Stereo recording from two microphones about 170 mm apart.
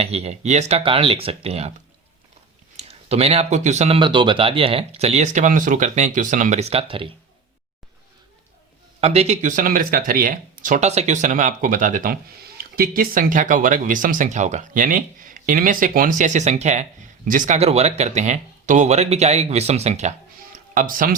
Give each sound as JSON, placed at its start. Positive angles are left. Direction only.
{"t": 0.0, "sound": "speech", "side_deg": -35}
{"t": 2.7, "sound": "speech", "side_deg": -35}
{"t": 9.0, "sound": "speech", "side_deg": -40}
{"t": 20.7, "sound": "speech", "side_deg": -55}